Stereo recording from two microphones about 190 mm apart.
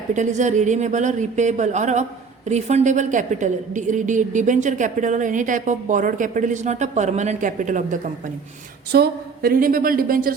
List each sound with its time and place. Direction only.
0.1 s a woman's voice: 40° right (ahead or behind)
8.9 s a woman's voice: 55° right (ahead or behind)